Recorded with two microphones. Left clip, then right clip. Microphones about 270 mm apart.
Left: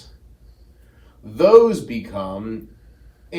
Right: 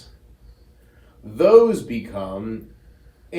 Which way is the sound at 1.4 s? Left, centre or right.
Left.